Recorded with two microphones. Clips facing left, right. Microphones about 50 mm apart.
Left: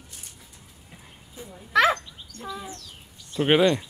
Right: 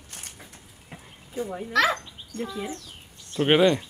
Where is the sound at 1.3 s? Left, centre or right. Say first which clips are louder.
Right 12 dB; right.